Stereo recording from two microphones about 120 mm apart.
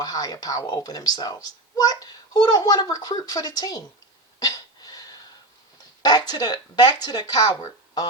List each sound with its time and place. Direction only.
0.0 s a woman's voice: 35° left (ahead or behind)
4.4 s cough: 30° left (ahead or behind)
6.0 s a woman's voice: 35° left (ahead or behind)